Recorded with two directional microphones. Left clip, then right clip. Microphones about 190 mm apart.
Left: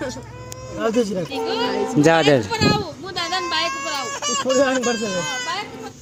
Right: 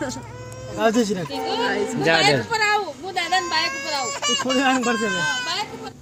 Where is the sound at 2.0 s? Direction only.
45° left (ahead or behind).